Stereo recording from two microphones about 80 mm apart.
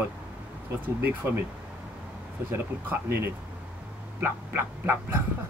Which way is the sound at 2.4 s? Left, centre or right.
Right.